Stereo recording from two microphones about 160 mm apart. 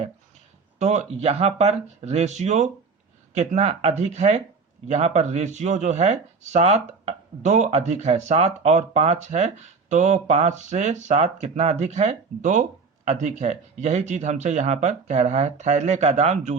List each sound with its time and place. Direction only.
0.8 s speech: 45° right (ahead or behind)